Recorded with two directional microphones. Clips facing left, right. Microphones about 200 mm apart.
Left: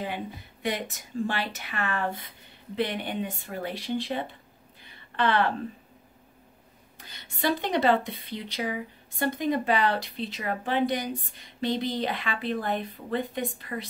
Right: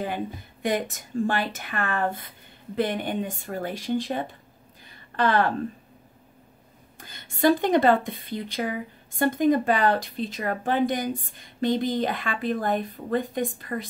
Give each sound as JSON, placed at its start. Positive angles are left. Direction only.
{"t": 0.0, "sound": "speech", "side_deg": -45}
{"t": 4.8, "sound": "a sound", "side_deg": -40}
{"t": 7.0, "sound": "speech", "side_deg": -50}